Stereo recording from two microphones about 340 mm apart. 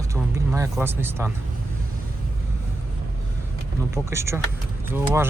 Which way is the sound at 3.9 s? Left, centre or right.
Centre.